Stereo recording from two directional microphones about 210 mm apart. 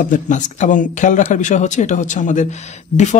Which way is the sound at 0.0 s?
35° left (ahead or behind).